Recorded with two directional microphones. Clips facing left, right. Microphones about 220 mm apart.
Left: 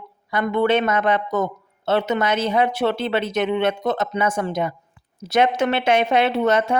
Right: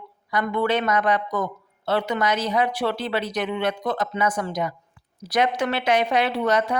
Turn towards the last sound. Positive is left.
turn(degrees=25)  # may be behind; listen again after turning